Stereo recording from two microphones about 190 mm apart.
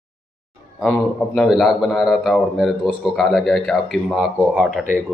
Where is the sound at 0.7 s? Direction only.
Centre (ahead or behind).